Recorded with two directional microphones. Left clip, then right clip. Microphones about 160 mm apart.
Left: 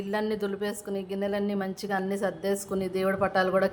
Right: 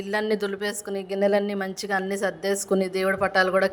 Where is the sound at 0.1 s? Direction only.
35° right (ahead or behind).